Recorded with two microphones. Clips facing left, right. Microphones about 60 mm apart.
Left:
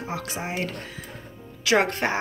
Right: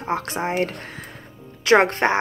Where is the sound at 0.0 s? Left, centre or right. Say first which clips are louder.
Right 7 dB; right.